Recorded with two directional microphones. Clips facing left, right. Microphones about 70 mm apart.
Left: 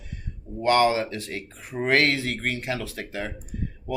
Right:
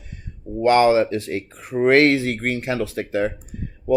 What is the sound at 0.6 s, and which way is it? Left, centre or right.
Speech, right.